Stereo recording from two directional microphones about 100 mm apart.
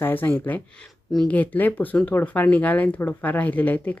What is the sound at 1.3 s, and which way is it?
Speech, 15° left (ahead or behind).